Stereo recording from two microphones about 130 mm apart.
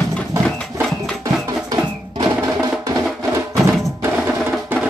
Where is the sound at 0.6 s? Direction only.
5° left (ahead or behind).